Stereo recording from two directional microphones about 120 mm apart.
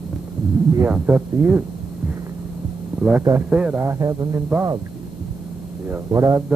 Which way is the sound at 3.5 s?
15° right (ahead or behind).